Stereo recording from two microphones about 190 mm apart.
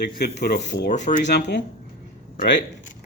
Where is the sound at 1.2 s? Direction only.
65° left (ahead or behind).